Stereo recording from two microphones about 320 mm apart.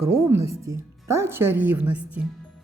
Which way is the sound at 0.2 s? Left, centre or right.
Centre.